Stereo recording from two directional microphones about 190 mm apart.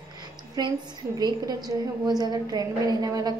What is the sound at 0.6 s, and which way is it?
A woman's voice, 20° right (ahead or behind).